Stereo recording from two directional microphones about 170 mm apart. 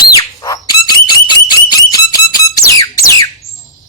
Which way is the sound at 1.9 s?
20° left (ahead or behind).